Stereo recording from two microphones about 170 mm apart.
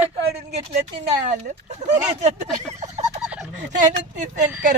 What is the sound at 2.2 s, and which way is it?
Speech, 40° right (ahead or behind).